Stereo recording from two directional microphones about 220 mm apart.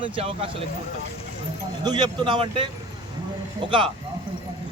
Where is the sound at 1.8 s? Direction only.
20° right (ahead or behind).